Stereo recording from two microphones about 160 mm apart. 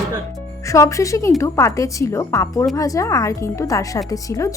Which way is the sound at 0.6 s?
20° left (ahead or behind).